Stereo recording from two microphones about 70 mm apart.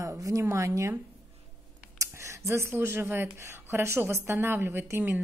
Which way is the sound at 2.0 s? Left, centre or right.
Right.